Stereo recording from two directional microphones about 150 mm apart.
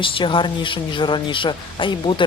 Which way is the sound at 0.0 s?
35° left (ahead or behind).